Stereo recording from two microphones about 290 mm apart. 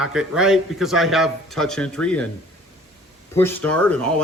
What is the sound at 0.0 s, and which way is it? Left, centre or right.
A man's voice, centre.